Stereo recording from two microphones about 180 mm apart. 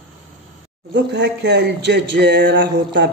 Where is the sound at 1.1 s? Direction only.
70° right (ahead or behind).